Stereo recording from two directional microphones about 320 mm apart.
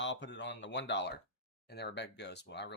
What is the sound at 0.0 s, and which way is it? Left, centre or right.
Speech, left.